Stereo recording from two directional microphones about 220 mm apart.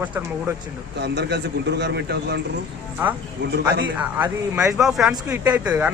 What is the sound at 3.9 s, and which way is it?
Speech, 5° right (ahead or behind).